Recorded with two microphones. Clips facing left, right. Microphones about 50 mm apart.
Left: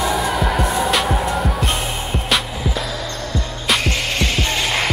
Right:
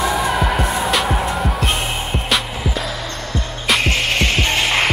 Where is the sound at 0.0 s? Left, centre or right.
Centre.